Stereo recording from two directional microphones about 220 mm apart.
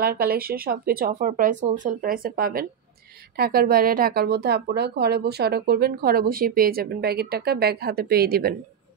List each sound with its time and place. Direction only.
0.0 s a woman's voice: 45° right (ahead or behind)